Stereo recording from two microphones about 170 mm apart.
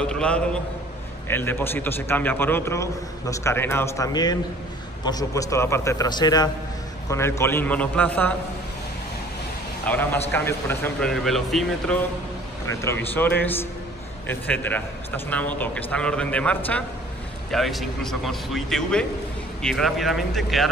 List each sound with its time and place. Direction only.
0.0 s a man's voice: 5° left (ahead or behind)
9.8 s a man's voice: 10° left (ahead or behind)
12.8 s a man's voice: 10° left (ahead or behind)